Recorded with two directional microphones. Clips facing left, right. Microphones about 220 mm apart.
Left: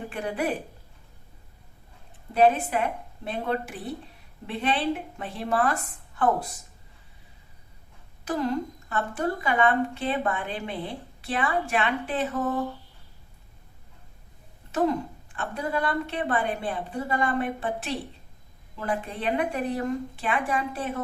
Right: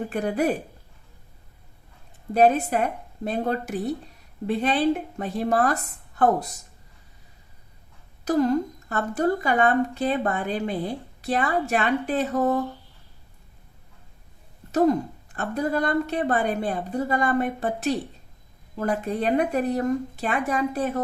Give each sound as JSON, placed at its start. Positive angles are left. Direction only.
{"t": 0.1, "sound": "speech", "side_deg": -40}
{"t": 2.3, "sound": "speech", "side_deg": -40}
{"t": 8.2, "sound": "speech", "side_deg": -40}
{"t": 14.7, "sound": "speech", "side_deg": -40}